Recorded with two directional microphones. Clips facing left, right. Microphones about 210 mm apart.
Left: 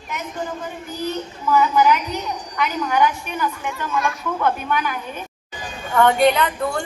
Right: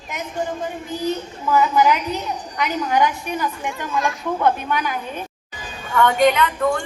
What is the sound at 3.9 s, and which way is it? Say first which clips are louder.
Speech: even; 30° right (ahead or behind).